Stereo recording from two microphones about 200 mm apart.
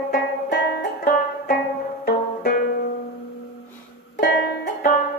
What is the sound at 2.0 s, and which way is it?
Music, 50° left (ahead or behind).